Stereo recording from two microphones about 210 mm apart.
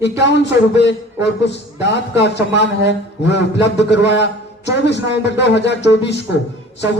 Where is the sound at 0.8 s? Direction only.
55° left (ahead or behind).